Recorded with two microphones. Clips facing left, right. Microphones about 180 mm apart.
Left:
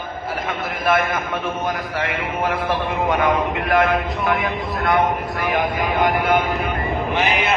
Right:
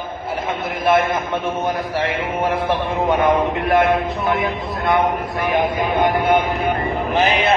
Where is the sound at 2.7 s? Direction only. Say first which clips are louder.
Right 2 dB; 30° right (ahead or behind).